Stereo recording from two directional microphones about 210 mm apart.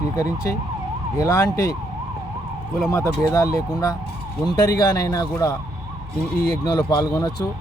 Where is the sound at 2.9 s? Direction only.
15° left (ahead or behind).